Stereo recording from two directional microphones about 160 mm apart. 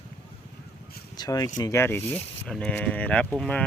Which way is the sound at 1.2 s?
20° left (ahead or behind).